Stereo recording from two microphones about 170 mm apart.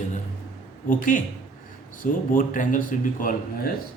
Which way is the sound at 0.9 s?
50° left (ahead or behind).